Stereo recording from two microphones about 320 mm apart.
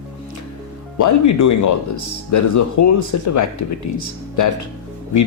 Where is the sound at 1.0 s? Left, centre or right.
Left.